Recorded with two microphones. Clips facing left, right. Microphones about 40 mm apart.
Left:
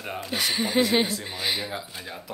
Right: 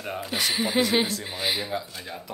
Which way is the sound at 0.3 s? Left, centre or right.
Centre.